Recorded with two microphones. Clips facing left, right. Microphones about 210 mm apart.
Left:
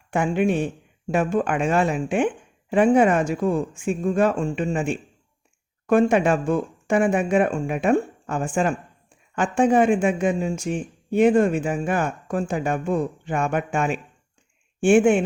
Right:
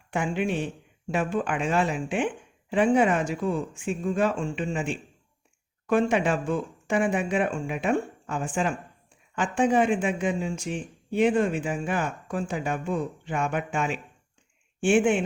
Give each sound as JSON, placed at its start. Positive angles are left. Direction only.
{"t": 0.1, "sound": "speech", "side_deg": 50}